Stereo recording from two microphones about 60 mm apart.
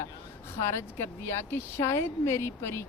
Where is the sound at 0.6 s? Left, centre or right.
Left.